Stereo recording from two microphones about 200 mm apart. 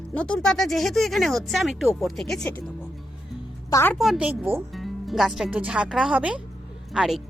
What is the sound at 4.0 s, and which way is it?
Speech, 5° right (ahead or behind).